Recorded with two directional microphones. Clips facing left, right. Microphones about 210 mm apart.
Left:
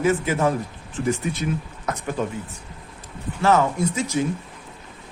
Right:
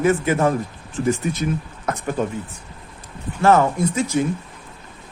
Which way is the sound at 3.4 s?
55° right (ahead or behind).